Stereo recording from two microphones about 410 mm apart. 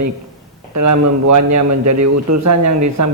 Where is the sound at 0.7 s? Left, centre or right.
Right.